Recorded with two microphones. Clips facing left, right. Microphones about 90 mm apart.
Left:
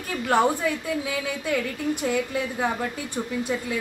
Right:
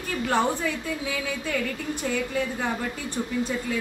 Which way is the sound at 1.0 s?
10° left (ahead or behind).